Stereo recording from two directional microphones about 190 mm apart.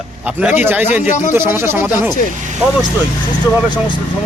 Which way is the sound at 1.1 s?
40° left (ahead or behind).